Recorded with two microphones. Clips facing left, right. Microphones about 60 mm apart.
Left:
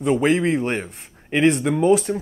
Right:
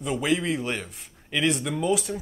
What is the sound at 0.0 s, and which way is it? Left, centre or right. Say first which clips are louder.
Speech: left 7 dB; left.